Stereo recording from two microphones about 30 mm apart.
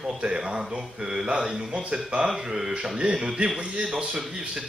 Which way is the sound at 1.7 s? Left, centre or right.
Right.